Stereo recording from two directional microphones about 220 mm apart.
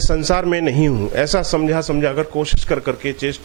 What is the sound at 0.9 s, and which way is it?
Speech, 25° right (ahead or behind).